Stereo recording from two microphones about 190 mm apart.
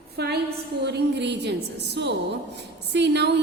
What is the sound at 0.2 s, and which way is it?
A woman's voice, 55° right (ahead or behind).